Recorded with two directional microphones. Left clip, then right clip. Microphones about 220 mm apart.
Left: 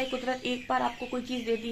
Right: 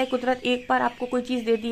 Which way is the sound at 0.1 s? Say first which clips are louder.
Right 7 dB; 40° right (ahead or behind).